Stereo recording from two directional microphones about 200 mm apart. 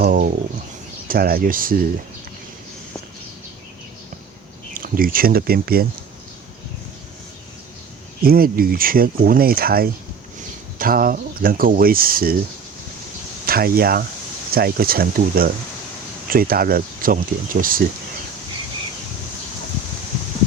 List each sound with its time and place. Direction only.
0.0 s a sound: 45° right (ahead or behind)
1.0 s speech: 45° right (ahead or behind)
4.7 s speech: 45° right (ahead or behind)
8.2 s speech: 50° right (ahead or behind)
13.4 s speech: 50° right (ahead or behind)